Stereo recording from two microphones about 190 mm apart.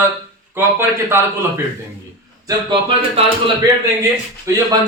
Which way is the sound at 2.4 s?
25° right (ahead or behind).